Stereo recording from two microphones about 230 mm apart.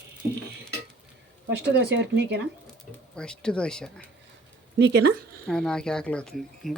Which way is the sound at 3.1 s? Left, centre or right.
Centre.